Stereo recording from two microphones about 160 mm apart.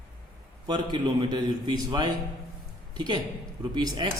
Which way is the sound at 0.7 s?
25° right (ahead or behind).